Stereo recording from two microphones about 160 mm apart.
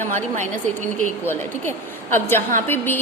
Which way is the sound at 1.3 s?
15° left (ahead or behind).